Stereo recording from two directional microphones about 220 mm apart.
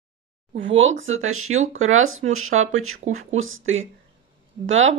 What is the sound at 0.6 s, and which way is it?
Speech, 60° right (ahead or behind).